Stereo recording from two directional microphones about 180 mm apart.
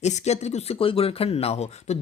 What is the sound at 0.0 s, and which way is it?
Speech, 40° left (ahead or behind).